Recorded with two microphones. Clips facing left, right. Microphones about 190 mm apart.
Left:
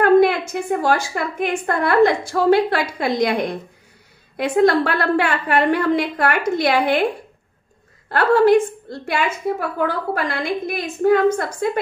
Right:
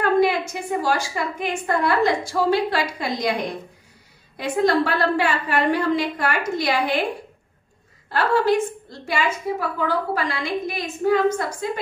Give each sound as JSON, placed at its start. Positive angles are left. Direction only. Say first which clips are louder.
{"t": 0.0, "sound": "a woman's voice", "louder": "left 5 dB", "side_deg": 55}
{"t": 4.4, "sound": "a woman's voice", "louder": "left 4 dB", "side_deg": 60}
{"t": 8.1, "sound": "a woman's voice", "louder": "left 6 dB", "side_deg": 55}